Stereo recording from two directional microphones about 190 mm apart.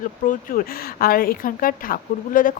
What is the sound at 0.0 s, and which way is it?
A woman's voice, 50° left (ahead or behind).